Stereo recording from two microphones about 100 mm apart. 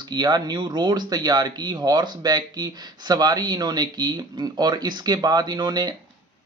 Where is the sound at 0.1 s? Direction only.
45° right (ahead or behind).